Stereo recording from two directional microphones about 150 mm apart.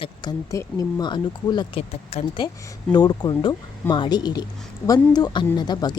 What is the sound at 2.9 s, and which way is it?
Speech, 30° left (ahead or behind).